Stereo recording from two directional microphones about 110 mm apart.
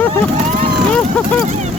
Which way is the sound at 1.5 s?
90° right.